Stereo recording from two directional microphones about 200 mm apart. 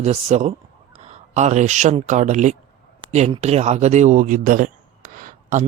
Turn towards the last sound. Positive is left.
turn(degrees=-40)  # may be behind; listen again after turning